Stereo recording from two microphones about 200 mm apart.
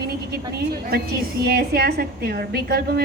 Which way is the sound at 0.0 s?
50° right (ahead or behind).